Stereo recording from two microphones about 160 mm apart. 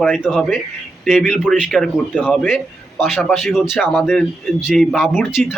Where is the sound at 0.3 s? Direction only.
Centre (ahead or behind).